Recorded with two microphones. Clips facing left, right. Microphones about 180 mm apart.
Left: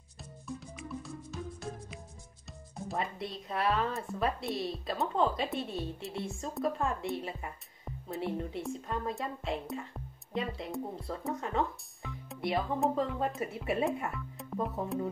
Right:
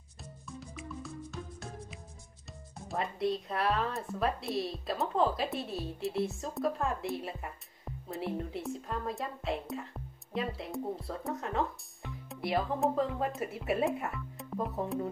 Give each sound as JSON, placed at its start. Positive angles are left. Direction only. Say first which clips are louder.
{"t": 0.2, "sound": "music", "louder": "left 3 dB", "side_deg": 0}
{"t": 2.9, "sound": "speech", "louder": "right 5 dB", "side_deg": 0}